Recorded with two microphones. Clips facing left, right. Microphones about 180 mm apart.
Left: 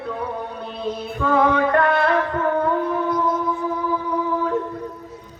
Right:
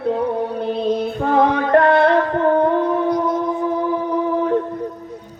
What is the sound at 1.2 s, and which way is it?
Music, 40° right (ahead or behind).